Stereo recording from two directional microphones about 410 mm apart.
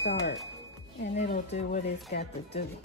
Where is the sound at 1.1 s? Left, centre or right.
Centre.